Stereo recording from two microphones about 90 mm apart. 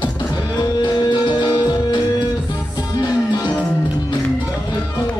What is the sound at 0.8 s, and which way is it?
Music, 55° left (ahead or behind).